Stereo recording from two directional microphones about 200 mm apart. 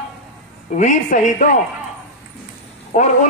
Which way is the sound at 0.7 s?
40° left (ahead or behind).